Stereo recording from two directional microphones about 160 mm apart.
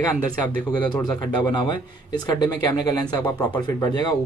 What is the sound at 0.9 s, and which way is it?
Speech, 30° left (ahead or behind).